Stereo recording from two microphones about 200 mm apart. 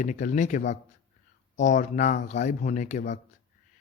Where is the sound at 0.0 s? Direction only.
40° left (ahead or behind).